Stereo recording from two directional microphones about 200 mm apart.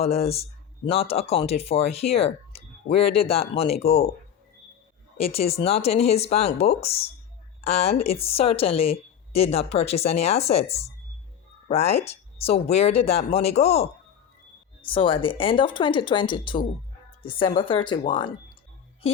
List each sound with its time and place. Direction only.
0.0 s a woman's voice: 30° left (ahead or behind)
5.1 s a woman's voice: 30° left (ahead or behind)